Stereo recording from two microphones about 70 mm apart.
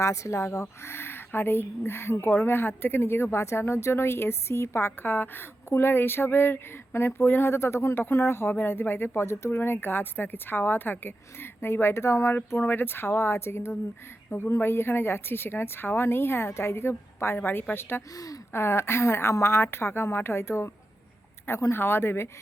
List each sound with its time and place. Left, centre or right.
0.0 s a woman's voice: left
12.6 s a woman's voice: left